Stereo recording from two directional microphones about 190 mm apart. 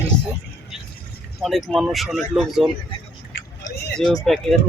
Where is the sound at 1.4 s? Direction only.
Centre (ahead or behind).